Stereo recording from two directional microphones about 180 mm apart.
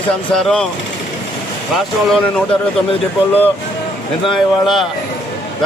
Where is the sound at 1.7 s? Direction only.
Centre (ahead or behind).